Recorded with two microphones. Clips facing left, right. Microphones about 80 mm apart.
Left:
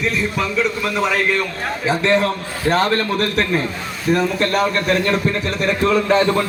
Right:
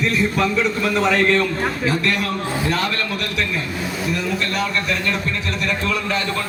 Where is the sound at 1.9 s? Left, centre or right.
Left.